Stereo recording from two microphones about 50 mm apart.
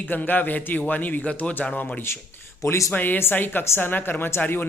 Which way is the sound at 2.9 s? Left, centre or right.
Left.